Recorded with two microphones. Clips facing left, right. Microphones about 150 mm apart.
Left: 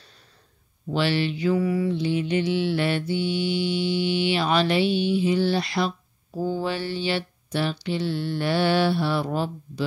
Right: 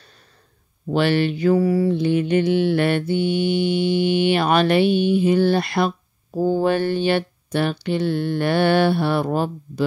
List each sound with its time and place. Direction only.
0.9 s mantra: 50° right (ahead or behind)
2.0 s mantra: 55° right (ahead or behind)